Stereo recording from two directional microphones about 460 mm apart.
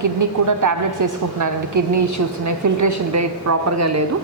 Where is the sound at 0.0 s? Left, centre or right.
Right.